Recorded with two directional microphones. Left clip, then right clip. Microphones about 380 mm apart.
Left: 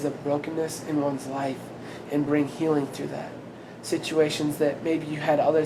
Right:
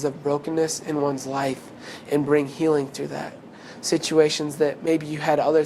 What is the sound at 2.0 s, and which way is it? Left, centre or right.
Speech, right.